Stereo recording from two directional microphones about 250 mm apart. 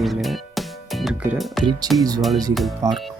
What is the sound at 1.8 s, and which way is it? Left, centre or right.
Speech, centre.